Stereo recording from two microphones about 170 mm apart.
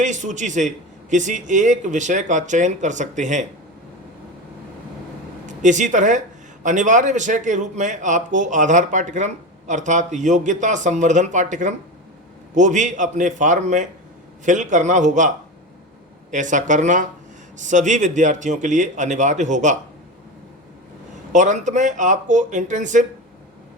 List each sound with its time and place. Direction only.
0.0 s speech: 45° right (ahead or behind)
5.5 s speech: 45° right (ahead or behind)
16.3 s speech: 45° right (ahead or behind)
21.3 s speech: 45° right (ahead or behind)